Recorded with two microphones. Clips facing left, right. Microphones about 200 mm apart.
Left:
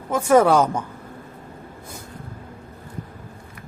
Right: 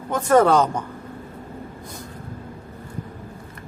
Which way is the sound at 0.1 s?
10° left (ahead or behind).